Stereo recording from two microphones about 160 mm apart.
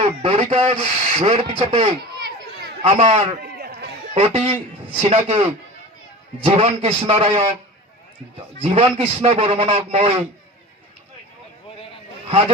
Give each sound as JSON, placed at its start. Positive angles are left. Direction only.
{"t": 0.0, "sound": "a man's voice", "side_deg": -40}
{"t": 3.1, "sound": "a man's voice", "side_deg": -35}
{"t": 3.4, "sound": "a sound", "side_deg": -80}
{"t": 4.1, "sound": "a man's voice", "side_deg": -40}
{"t": 6.4, "sound": "a man's voice", "side_deg": -40}
{"t": 8.6, "sound": "a man's voice", "side_deg": -35}